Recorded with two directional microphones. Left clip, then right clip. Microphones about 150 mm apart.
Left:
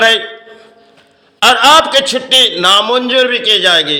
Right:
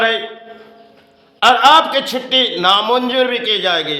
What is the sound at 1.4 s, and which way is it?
A man's voice, 20° left (ahead or behind).